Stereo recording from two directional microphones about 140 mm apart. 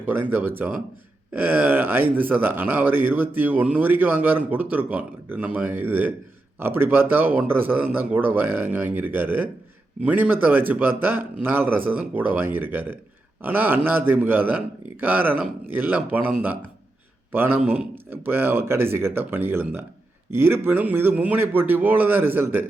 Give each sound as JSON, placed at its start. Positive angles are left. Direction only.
{"t": 0.0, "sound": "speech", "side_deg": -15}